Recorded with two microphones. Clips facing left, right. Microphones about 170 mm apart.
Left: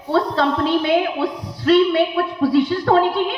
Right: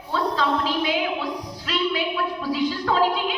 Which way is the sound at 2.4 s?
60° left (ahead or behind).